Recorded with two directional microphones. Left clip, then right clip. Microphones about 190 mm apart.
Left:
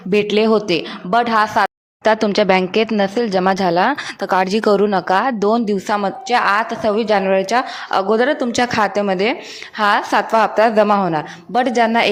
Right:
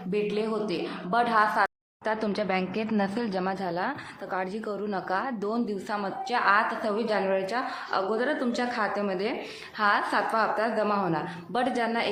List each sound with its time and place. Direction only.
0.1 s speech: 45° left (ahead or behind)
2.9 s speech: 35° left (ahead or behind)